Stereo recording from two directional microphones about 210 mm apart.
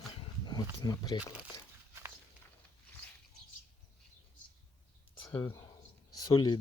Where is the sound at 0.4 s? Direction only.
20° left (ahead or behind).